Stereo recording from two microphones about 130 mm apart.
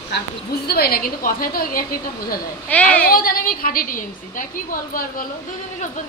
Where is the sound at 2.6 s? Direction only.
10° left (ahead or behind).